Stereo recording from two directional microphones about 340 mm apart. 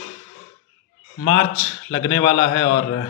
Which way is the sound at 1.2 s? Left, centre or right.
Left.